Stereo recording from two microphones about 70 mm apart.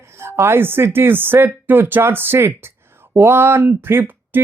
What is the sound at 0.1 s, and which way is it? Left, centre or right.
A woman's voice, right.